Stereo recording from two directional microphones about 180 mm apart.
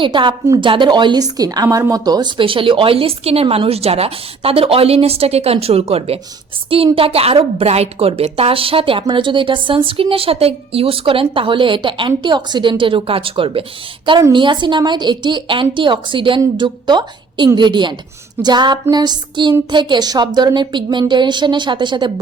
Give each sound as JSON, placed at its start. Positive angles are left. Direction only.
{"t": 0.0, "sound": "a woman's voice", "side_deg": -25}